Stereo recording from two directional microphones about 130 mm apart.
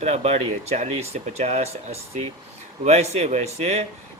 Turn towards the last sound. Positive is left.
turn(degrees=-55)  # may be behind; listen again after turning